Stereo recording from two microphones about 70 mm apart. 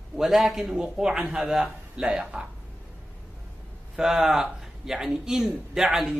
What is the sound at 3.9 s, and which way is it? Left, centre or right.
A man's voice, centre.